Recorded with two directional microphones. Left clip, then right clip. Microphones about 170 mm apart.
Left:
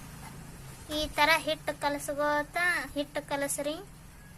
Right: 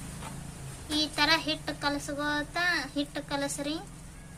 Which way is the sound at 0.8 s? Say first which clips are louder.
Even; 30° left (ahead or behind).